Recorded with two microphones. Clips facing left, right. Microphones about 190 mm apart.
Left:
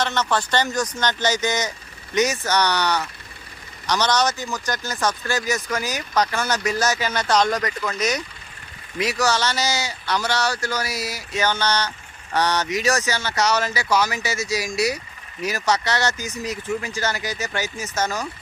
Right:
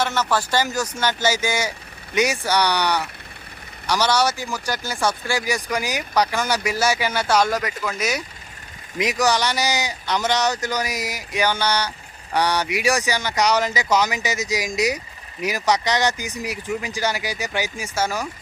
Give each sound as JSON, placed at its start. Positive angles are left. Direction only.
{"t": 0.0, "sound": "speech", "side_deg": -5}